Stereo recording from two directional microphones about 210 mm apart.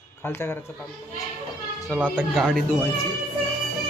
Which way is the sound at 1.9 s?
5° left (ahead or behind).